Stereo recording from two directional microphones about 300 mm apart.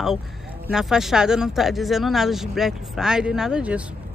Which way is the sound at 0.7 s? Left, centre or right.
Centre.